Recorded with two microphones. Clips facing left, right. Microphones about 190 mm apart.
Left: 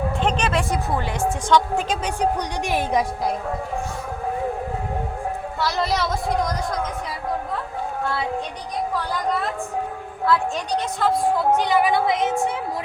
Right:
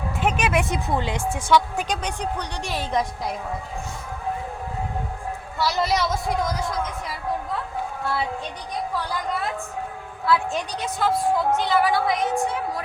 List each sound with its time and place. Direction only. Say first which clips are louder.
0.2 s speech: right 1 dB; 5° right (ahead or behind)
0.5 s speech: even; 20° right (ahead or behind)
1.5 s a woman's voice: even; 5° right (ahead or behind); by 3.1 s 10° left (ahead or behind)
5.6 s speech: right 1 dB; centre (ahead or behind)
11.0 s speech: left 1 dB; 5° right (ahead or behind)
11.5 s a woman's voice: left 2 dB; 15° left (ahead or behind)